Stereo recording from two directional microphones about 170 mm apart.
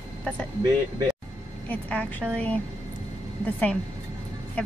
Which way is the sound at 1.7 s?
5° left (ahead or behind).